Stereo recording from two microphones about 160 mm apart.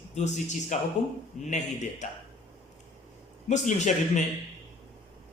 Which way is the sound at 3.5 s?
50° left (ahead or behind).